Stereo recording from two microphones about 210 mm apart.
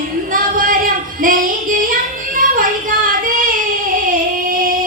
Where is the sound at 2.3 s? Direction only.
40° right (ahead or behind).